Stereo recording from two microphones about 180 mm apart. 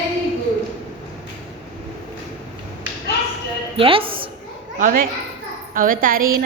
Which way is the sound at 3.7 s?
30° right (ahead or behind).